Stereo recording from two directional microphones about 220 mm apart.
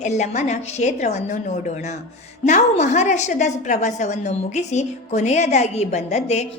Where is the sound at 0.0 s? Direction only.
30° left (ahead or behind).